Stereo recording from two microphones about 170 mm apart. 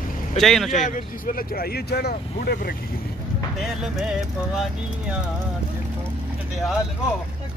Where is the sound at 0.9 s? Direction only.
60° left (ahead or behind).